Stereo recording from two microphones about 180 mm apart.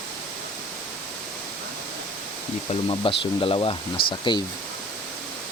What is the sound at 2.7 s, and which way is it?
Speech, 30° left (ahead or behind).